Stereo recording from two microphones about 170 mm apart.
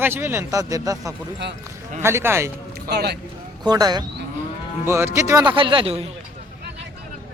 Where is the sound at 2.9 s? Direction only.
70° right (ahead or behind).